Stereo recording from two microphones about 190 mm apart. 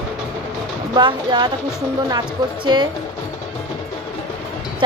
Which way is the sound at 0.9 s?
25° right (ahead or behind).